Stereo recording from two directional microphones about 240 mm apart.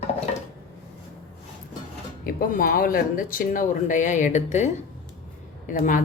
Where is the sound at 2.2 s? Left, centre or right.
Left.